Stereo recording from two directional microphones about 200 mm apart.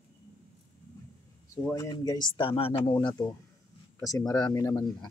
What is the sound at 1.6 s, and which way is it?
Speech, 15° left (ahead or behind).